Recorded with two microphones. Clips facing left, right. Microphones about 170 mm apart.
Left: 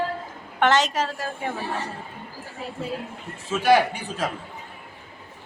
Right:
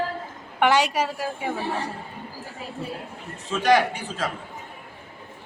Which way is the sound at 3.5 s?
10° left (ahead or behind).